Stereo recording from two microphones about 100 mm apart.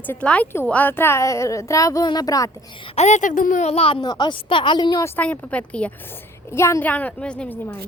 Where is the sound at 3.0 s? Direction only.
90° left.